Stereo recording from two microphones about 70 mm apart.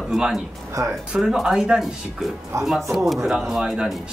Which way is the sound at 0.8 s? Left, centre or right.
Right.